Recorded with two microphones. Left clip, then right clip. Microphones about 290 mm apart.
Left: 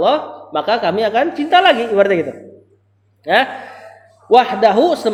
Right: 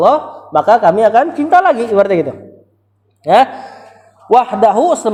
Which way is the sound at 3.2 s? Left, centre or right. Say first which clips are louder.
Right 5 dB; right.